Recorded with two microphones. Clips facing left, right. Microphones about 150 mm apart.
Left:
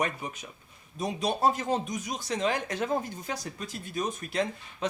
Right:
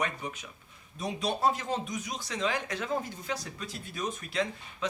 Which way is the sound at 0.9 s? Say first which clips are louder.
Left 3 dB; 40° left (ahead or behind).